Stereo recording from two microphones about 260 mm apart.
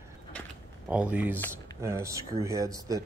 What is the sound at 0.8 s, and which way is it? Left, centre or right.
Speech, centre.